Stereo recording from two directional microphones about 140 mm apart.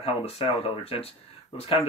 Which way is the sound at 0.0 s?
45° left (ahead or behind).